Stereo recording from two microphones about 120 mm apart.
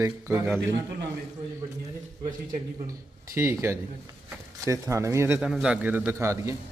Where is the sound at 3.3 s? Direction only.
20° right (ahead or behind).